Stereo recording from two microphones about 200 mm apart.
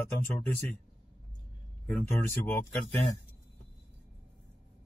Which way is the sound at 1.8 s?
10° left (ahead or behind).